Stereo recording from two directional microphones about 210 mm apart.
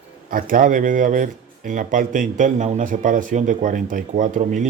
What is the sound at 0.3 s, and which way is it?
Speech, 40° right (ahead or behind).